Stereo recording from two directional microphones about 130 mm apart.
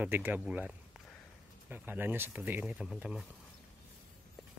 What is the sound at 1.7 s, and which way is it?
Speech, 15° right (ahead or behind).